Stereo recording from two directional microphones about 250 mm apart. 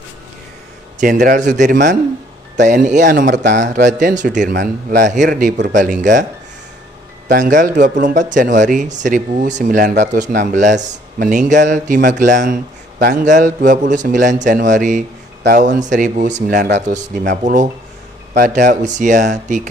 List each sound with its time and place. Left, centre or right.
0.9 s speech: right
7.3 s speech: right